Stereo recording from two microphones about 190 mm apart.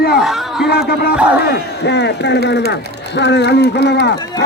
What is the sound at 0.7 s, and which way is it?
Speech, 55° left (ahead or behind).